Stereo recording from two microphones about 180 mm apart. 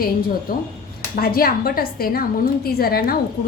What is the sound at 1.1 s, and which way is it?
Speech, 55° left (ahead or behind).